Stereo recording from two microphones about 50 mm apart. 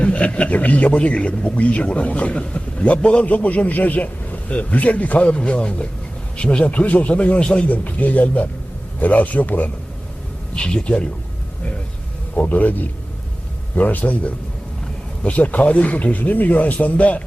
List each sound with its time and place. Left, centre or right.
0.0 s a man's voice: left
10.5 s a man's voice: centre
12.4 s a man's voice: left